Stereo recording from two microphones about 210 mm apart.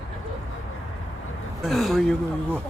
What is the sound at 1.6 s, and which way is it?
Speech, centre (ahead or behind).